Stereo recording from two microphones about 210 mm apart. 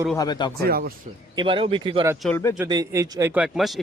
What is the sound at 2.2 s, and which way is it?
Speech, 10° left (ahead or behind).